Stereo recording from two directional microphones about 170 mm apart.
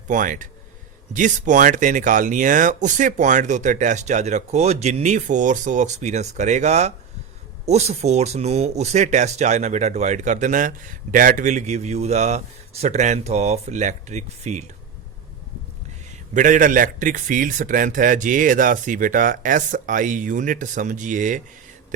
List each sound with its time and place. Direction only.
0.1 s speech: 50° right (ahead or behind)
16.3 s speech: 50° right (ahead or behind)